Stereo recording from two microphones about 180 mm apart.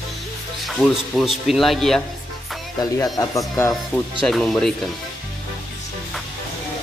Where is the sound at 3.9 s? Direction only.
Centre (ahead or behind).